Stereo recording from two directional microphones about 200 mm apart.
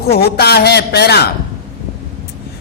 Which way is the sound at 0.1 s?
50° left (ahead or behind).